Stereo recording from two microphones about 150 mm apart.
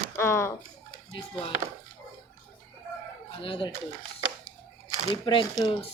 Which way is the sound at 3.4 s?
35° left (ahead or behind).